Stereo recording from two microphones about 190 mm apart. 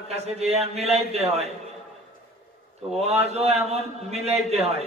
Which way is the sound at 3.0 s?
35° right (ahead or behind).